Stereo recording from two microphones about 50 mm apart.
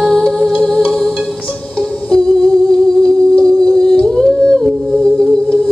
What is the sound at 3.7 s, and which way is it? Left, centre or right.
Humming, centre.